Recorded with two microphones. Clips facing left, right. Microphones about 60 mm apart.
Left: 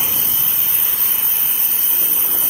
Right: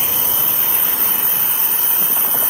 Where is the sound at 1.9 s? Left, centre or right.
Right.